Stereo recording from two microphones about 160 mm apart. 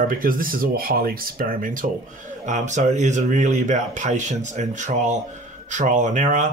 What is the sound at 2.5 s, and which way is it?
Speech, 45° right (ahead or behind).